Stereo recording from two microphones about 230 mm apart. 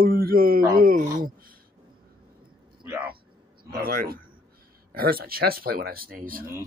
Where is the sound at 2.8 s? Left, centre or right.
Centre.